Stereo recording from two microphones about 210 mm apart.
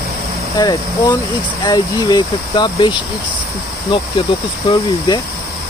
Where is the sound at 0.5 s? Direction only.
20° left (ahead or behind).